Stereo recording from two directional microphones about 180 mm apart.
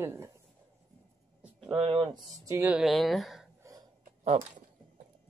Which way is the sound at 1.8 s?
30° right (ahead or behind).